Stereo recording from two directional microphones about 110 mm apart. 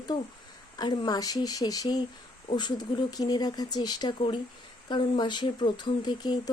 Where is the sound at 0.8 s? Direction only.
40° left (ahead or behind).